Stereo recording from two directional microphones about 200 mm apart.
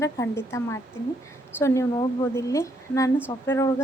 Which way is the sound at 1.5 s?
15° left (ahead or behind).